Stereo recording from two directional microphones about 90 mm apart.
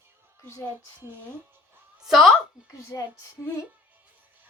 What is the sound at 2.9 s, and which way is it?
Female singing, 40° left (ahead or behind).